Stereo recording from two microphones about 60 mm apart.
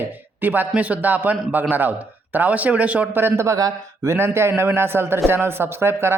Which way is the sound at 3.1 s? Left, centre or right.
Right.